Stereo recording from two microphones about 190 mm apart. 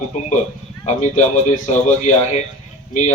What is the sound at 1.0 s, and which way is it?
A man's voice, 40° left (ahead or behind).